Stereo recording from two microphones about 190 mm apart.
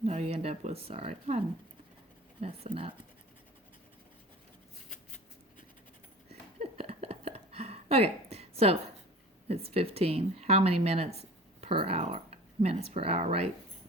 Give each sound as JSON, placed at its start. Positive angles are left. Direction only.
{"t": 0.0, "sound": "speech", "side_deg": -35}
{"t": 6.6, "sound": "a sound", "side_deg": -30}
{"t": 9.5, "sound": "speech", "side_deg": -30}